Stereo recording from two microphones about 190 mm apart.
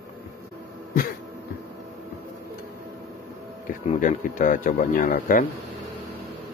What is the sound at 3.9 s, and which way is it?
Speech, 45° left (ahead or behind).